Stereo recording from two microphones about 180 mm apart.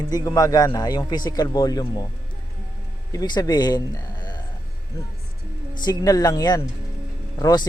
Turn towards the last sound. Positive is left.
turn(degrees=20)  # may be behind; listen again after turning